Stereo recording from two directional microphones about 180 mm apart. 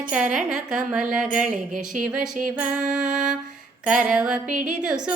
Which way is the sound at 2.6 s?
45° right (ahead or behind).